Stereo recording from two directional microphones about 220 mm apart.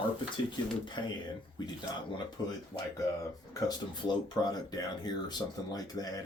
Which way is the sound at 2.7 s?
20° left (ahead or behind).